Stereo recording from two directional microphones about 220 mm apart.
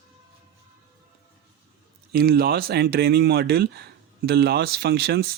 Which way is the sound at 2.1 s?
45° right (ahead or behind).